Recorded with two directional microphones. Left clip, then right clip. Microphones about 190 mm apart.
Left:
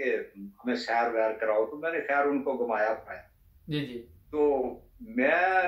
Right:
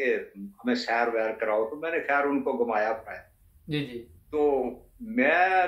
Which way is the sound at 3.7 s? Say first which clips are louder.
Right 2 dB; 10° left (ahead or behind).